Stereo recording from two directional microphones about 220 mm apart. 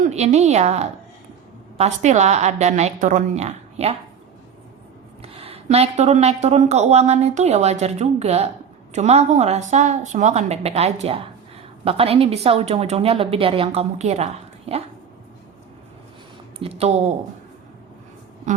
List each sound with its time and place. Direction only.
0.0 s a woman's voice: 30° right (ahead or behind)
5.2 s a woman's voice: 25° right (ahead or behind)
16.6 s speech: 25° right (ahead or behind)
18.5 s a woman's voice: 35° right (ahead or behind)